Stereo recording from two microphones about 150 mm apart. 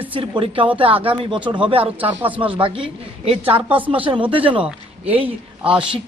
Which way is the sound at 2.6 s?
35° right (ahead or behind).